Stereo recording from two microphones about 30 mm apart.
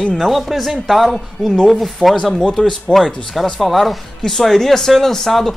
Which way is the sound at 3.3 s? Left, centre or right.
Centre.